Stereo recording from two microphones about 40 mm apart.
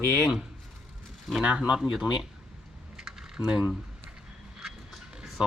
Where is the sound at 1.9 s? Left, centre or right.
Centre.